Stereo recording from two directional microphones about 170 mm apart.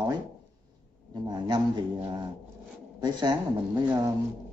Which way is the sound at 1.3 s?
25° right (ahead or behind).